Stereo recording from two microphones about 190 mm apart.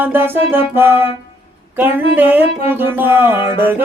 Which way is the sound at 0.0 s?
10° right (ahead or behind).